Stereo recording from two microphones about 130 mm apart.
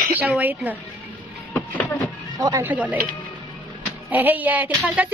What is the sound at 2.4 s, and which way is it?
Speech, 25° right (ahead or behind).